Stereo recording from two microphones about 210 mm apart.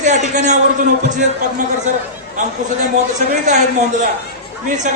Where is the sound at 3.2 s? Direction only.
35° right (ahead or behind).